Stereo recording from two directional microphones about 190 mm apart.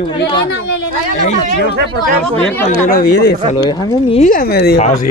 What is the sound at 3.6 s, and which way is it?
Speech, 30° left (ahead or behind).